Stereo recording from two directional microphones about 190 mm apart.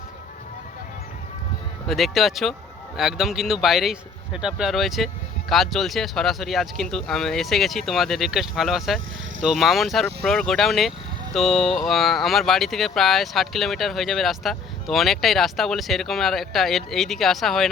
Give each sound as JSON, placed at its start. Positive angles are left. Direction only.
{"t": 1.9, "sound": "speech", "side_deg": 0}